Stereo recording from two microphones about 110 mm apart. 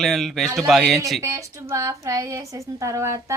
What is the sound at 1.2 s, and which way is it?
A woman's voice, 25° right (ahead or behind).